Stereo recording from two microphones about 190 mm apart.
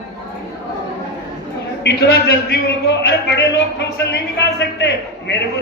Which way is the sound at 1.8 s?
55° left (ahead or behind).